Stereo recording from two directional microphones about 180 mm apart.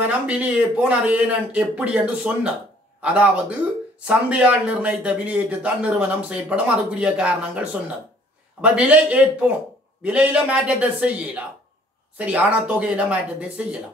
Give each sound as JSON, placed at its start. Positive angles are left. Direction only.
{"t": 0.0, "sound": "speech", "side_deg": -10}